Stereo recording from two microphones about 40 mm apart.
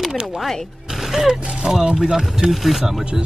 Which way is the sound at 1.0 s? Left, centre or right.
Centre.